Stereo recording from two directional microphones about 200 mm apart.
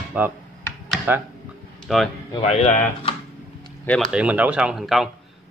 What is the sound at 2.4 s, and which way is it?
Speech, 30° left (ahead or behind).